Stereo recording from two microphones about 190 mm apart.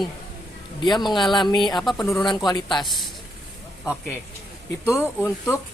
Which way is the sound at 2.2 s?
20° left (ahead or behind).